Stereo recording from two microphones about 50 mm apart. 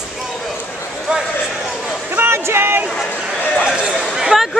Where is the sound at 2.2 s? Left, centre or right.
Right.